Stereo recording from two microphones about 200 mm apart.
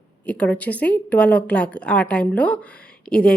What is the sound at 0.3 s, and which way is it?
A woman's voice, 5° left (ahead or behind).